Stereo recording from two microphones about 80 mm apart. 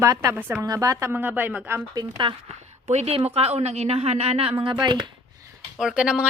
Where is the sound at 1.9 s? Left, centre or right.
Right.